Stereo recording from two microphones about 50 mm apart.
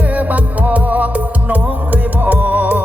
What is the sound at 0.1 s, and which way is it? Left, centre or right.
Music, right.